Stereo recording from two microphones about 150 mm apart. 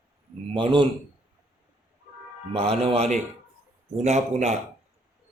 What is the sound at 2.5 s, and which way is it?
A man's voice, 40° right (ahead or behind).